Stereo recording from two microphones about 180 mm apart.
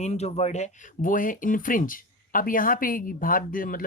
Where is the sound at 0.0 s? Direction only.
35° left (ahead or behind).